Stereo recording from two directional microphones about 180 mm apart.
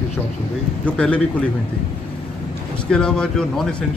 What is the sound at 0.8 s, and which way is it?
Speech, 5° left (ahead or behind).